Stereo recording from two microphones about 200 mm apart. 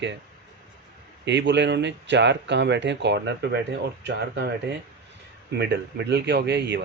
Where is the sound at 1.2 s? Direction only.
60° right (ahead or behind).